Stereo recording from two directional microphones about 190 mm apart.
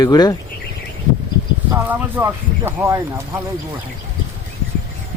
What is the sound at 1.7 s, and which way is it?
Speech, 10° right (ahead or behind).